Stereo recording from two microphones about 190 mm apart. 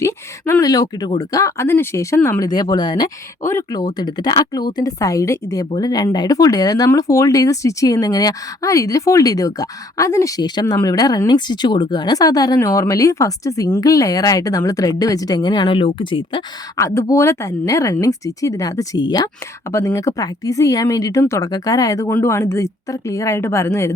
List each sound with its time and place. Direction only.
0.0 s speech: 15° left (ahead or behind)